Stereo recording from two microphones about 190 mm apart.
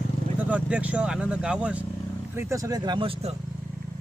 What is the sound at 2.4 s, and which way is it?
Speech, 15° right (ahead or behind).